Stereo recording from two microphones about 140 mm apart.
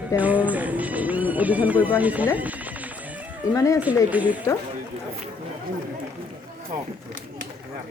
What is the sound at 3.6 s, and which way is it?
Speech, 25° left (ahead or behind).